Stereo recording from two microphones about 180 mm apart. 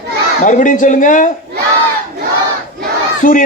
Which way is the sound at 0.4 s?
45° left (ahead or behind).